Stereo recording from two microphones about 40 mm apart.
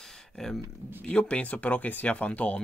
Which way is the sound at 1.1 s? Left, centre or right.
Left.